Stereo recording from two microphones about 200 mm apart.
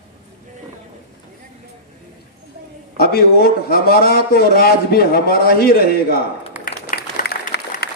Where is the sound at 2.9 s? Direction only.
50° left (ahead or behind).